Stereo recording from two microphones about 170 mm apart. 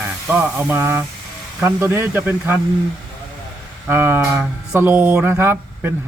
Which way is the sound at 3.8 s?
15° right (ahead or behind).